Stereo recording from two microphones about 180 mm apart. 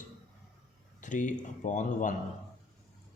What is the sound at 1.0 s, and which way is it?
Speech, 45° left (ahead or behind).